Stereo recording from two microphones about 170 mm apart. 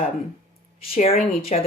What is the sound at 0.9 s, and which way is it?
Speech, 35° left (ahead or behind).